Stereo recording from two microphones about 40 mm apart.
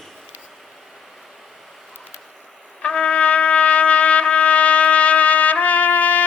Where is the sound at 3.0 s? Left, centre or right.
Left.